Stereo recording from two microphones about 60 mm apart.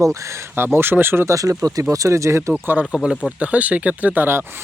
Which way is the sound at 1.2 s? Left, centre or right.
Right.